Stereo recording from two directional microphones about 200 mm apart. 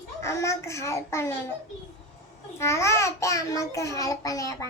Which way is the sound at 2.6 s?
15° left (ahead or behind).